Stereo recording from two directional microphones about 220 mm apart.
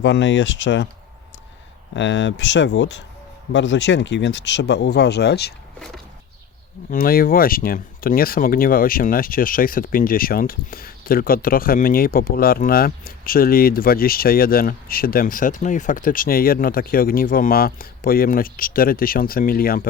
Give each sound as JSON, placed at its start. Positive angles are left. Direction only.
{"t": 0.0, "sound": "speech", "side_deg": 55}
{"t": 1.9, "sound": "speech", "side_deg": 55}
{"t": 6.9, "sound": "speech", "side_deg": 40}